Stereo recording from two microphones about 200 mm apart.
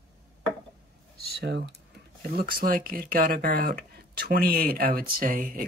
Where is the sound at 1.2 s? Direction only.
55° right (ahead or behind).